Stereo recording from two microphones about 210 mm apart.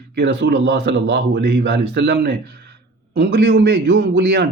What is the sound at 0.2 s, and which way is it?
Speech, 55° right (ahead or behind).